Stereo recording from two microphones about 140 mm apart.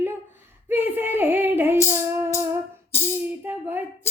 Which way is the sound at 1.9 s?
20° right (ahead or behind).